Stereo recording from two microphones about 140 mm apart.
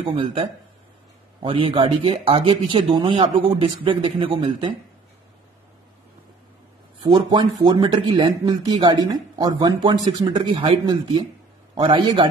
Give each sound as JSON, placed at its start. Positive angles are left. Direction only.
{"t": 0.0, "sound": "speech", "side_deg": -40}
{"t": 7.0, "sound": "speech", "side_deg": -35}